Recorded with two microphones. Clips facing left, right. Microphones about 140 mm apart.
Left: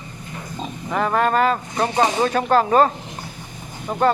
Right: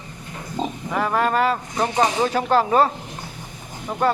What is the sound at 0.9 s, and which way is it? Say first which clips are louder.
Speech: left 2 dB; 10° right (ahead or behind).